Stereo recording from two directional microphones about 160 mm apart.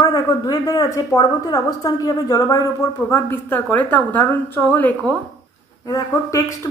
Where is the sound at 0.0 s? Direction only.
25° left (ahead or behind); by 5.1 s 10° left (ahead or behind).